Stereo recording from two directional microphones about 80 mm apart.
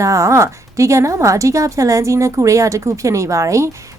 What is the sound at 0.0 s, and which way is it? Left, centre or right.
A woman's voice, right.